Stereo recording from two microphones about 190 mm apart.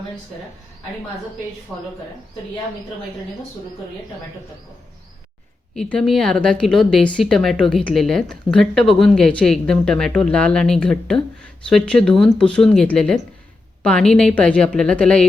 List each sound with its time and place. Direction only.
1.7 s speech: centre (ahead or behind)
5.7 s speech: 5° left (ahead or behind)